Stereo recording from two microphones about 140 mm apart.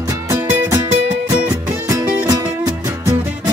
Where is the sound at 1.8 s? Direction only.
25° right (ahead or behind).